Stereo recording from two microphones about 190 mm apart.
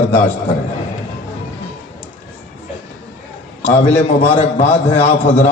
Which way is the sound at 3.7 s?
35° left (ahead or behind).